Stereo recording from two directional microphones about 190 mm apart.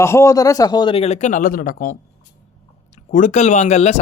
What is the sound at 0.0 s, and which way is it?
A man's voice, 15° left (ahead or behind).